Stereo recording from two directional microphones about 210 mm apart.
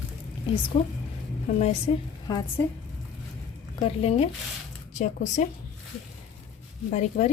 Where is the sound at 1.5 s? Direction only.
35° left (ahead or behind).